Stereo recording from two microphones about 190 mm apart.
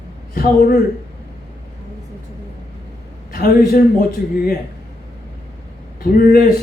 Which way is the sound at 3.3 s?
50° left (ahead or behind).